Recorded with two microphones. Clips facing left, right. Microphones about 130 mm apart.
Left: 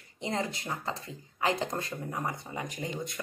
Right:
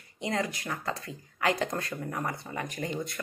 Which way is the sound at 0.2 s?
25° left (ahead or behind).